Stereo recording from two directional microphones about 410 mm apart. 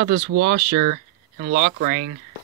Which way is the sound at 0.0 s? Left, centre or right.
Right.